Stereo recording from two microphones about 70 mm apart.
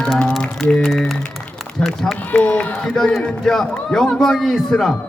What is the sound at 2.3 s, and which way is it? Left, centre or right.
Speech, left.